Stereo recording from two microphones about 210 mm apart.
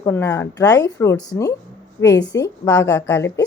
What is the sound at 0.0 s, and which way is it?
A woman's voice, 15° left (ahead or behind).